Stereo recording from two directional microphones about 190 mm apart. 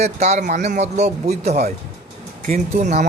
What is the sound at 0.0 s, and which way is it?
A man's voice, 35° right (ahead or behind).